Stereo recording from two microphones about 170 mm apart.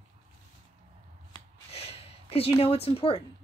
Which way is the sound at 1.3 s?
35° left (ahead or behind).